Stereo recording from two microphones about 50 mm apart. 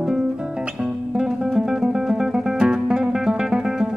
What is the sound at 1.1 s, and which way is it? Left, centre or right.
Music, centre.